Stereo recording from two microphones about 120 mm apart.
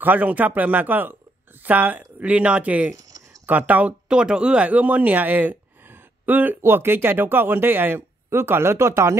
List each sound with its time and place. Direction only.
0.0 s speech: 15° right (ahead or behind)